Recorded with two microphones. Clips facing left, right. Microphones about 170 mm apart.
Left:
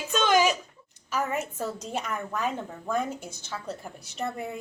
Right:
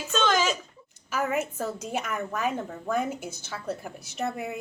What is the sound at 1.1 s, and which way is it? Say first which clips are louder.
A woman's voice: right 2 dB; 5° right (ahead or behind).